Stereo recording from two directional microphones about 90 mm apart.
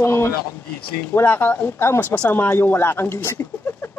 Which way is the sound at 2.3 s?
25° left (ahead or behind).